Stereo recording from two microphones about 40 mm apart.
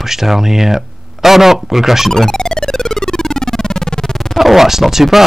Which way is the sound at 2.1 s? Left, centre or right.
Centre.